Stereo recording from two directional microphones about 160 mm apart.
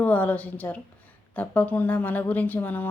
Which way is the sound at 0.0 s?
10° left (ahead or behind).